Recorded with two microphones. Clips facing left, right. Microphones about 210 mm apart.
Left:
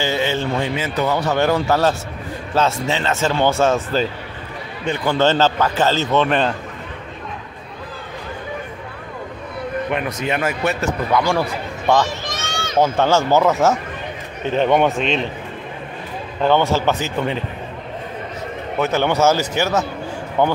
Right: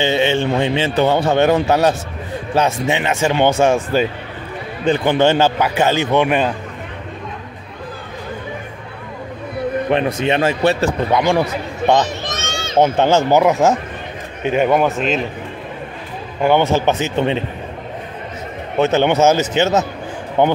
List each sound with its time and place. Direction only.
0.0 s a man's voice: 20° right (ahead or behind)
4.8 s a sound: 30° right (ahead or behind)
5.1 s speech: 15° right (ahead or behind)
9.8 s speech: 30° right (ahead or behind); by 15.2 s 5° right (ahead or behind)
16.4 s a man's voice: 15° right (ahead or behind)
18.8 s a man's voice: 20° right (ahead or behind)